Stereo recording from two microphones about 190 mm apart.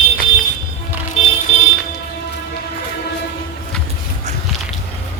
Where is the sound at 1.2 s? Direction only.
30° left (ahead or behind).